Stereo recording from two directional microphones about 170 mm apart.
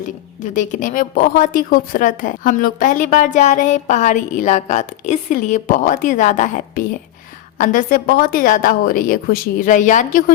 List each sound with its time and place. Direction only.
0.5 s a woman's voice: 50° left (ahead or behind)